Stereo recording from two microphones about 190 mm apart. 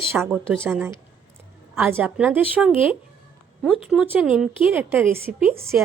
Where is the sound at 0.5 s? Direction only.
5° left (ahead or behind); by 5.7 s 10° right (ahead or behind).